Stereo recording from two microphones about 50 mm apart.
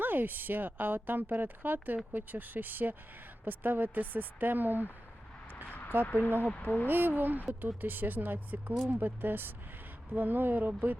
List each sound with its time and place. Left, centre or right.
0.0 s speech: right
6.1 s speech: left
6.8 s speech: right